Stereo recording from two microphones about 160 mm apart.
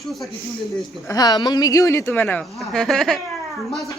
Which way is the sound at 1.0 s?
25° left (ahead or behind).